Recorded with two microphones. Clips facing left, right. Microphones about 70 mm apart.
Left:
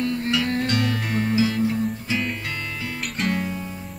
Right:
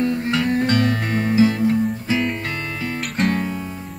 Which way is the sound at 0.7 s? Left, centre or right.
Right.